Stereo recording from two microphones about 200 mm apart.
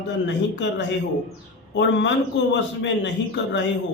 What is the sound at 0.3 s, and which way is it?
A man's voice, 60° left (ahead or behind).